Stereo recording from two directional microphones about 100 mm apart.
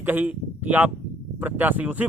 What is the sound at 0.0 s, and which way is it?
Speech, 20° right (ahead or behind).